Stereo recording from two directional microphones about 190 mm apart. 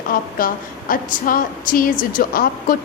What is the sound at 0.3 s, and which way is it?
A woman's voice, 45° left (ahead or behind).